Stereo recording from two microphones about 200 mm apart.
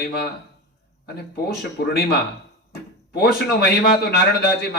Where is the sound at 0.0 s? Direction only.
55° left (ahead or behind).